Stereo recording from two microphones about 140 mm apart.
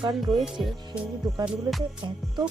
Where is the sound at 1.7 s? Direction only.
30° right (ahead or behind).